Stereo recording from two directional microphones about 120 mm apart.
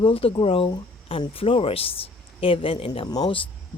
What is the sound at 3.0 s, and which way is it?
Speech, 35° left (ahead or behind).